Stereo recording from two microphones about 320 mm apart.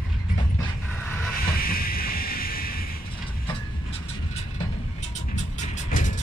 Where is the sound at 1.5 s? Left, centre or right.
Left.